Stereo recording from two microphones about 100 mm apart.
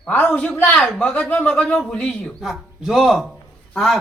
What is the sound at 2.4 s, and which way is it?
Speech, centre (ahead or behind).